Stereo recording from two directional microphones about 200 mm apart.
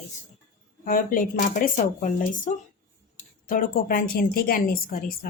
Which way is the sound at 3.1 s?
45° left (ahead or behind).